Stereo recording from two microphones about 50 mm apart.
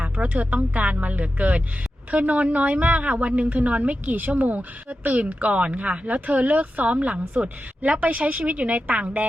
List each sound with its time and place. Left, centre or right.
0.0 s speech: right